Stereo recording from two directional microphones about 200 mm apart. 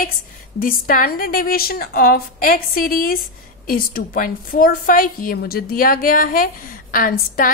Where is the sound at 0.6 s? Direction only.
45° left (ahead or behind).